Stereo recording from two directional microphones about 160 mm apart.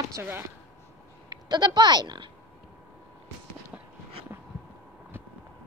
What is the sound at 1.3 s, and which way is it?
Speech, 25° right (ahead or behind).